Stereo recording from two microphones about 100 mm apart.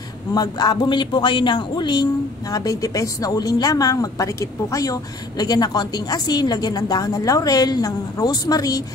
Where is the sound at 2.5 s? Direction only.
35° left (ahead or behind).